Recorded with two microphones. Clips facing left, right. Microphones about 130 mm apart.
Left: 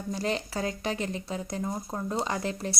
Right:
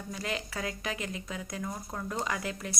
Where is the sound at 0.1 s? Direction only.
30° left (ahead or behind).